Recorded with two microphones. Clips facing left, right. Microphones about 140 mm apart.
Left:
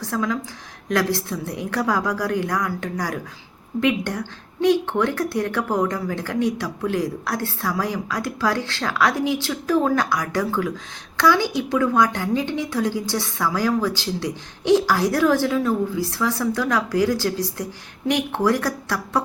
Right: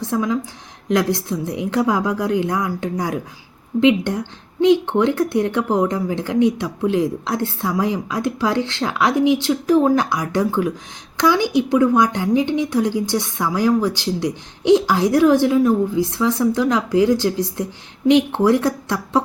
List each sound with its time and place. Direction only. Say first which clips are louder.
0.0 s a woman's voice: right 4 dB; 20° right (ahead or behind)